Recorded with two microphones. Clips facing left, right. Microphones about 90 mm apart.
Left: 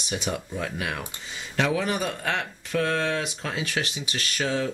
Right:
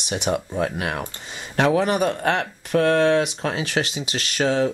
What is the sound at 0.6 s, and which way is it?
Speech, 45° right (ahead or behind).